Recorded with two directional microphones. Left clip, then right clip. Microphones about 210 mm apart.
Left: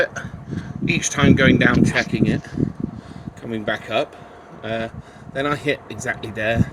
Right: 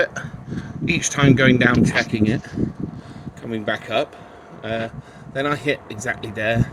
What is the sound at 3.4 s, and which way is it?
Speech, 15° left (ahead or behind).